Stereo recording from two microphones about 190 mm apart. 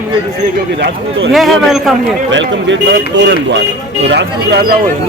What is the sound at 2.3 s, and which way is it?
Speech, 70° right (ahead or behind).